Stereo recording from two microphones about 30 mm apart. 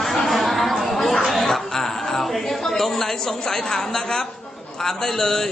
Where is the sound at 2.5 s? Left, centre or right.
Centre.